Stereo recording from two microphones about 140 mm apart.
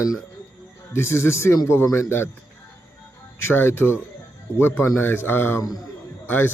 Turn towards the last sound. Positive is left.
turn(degrees=15)  # may be behind; listen again after turning